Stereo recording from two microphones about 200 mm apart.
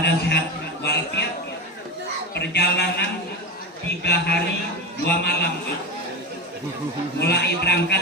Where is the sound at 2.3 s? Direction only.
55° left (ahead or behind).